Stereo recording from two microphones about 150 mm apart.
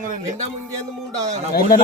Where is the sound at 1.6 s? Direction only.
70° left (ahead or behind).